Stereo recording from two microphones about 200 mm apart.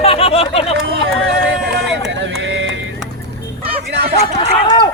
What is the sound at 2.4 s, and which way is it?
Music, 70° right (ahead or behind).